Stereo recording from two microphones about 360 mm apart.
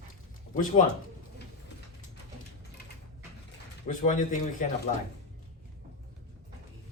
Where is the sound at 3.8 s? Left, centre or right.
Left.